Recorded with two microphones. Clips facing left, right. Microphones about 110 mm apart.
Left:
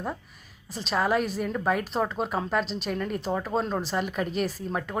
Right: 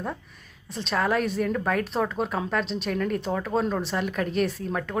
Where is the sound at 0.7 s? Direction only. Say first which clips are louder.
Even; centre (ahead or behind).